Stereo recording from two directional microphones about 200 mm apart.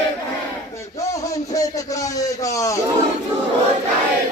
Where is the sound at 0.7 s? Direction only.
15° left (ahead or behind).